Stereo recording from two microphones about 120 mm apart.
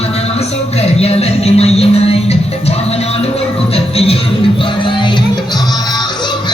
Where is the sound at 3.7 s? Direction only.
55° left (ahead or behind).